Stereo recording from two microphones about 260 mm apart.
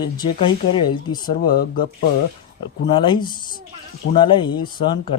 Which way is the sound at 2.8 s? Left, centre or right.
Centre.